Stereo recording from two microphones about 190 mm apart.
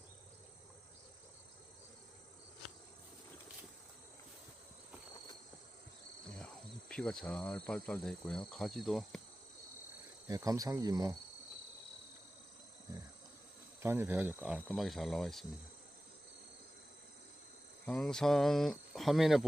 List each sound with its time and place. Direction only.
6.4 s speech: 5° left (ahead or behind)
10.2 s speech: 20° right (ahead or behind)
13.8 s speech: 10° right (ahead or behind)
17.8 s speech: 5° left (ahead or behind)